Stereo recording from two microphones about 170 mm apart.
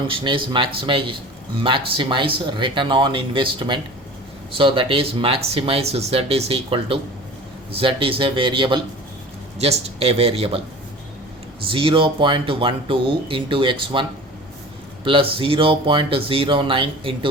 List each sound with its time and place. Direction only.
0.1 s speech: 30° right (ahead or behind)
11.7 s speech: 30° right (ahead or behind)
15.0 s speech: 30° right (ahead or behind)